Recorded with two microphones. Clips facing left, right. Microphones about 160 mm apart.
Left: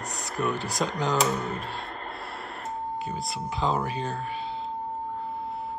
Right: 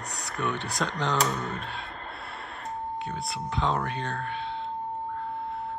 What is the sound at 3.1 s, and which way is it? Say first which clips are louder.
Speech: left 1 dB; 5° left (ahead or behind).